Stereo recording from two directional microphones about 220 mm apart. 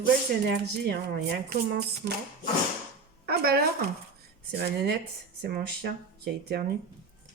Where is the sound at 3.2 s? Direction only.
45° right (ahead or behind).